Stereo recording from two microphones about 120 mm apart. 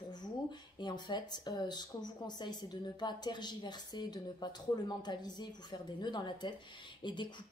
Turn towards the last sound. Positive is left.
turn(degrees=40)  # may be behind; listen again after turning